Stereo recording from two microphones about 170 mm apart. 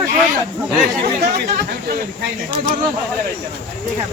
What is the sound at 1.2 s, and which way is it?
Speech, 75° right (ahead or behind).